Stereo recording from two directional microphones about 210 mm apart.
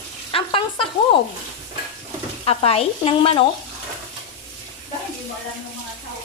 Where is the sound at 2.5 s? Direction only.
30° left (ahead or behind).